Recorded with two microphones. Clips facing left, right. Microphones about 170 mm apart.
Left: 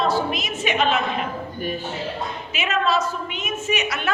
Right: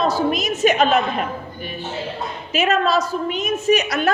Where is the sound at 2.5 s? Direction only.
40° right (ahead or behind).